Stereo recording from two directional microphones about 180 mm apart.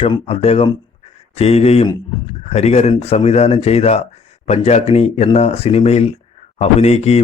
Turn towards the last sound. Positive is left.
turn(degrees=35)  # may be behind; listen again after turning